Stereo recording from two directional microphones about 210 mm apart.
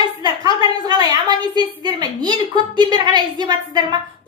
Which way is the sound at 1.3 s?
20° right (ahead or behind).